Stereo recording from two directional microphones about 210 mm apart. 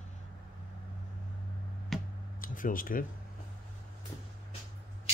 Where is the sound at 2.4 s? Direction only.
40° left (ahead or behind).